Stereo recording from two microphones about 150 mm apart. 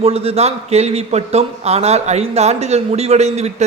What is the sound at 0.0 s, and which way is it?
Speech, 40° right (ahead or behind).